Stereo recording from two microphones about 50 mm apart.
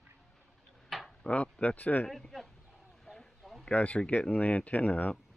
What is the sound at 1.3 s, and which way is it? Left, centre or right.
Speech, left.